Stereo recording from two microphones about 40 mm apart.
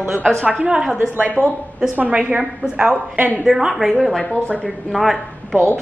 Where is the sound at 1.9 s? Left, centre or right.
Right.